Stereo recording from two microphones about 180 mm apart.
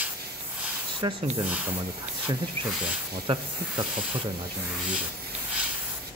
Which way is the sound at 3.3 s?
30° right (ahead or behind).